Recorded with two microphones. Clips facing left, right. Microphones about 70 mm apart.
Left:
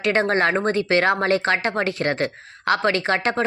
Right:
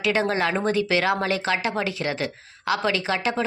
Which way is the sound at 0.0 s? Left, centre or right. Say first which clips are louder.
Left 3 dB; left.